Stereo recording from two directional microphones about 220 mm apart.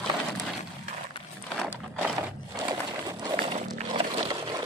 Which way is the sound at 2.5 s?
20° right (ahead or behind).